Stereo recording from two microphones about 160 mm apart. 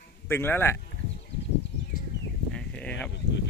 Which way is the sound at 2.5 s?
5° left (ahead or behind).